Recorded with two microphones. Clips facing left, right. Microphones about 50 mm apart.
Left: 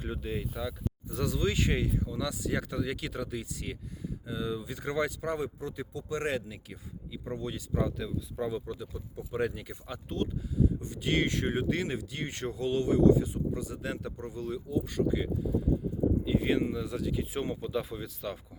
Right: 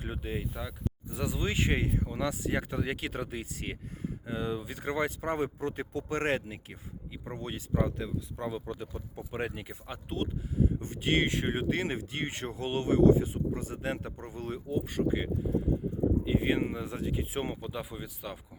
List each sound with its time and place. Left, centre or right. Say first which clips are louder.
0.0 s speech: left 1 dB; right
0.5 s speech: left 2 dB; centre
8.7 s speech: even; right
17.7 s speech: left 5 dB; centre